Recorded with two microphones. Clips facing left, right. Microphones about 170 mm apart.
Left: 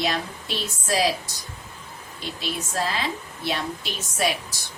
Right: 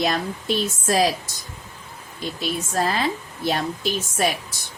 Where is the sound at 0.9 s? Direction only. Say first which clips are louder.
Right 2 dB; 45° right (ahead or behind).